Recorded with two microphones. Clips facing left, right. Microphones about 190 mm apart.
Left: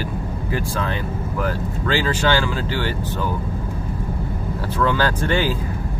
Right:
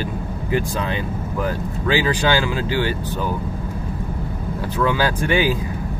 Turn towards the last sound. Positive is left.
turn(degrees=-15)  # may be behind; listen again after turning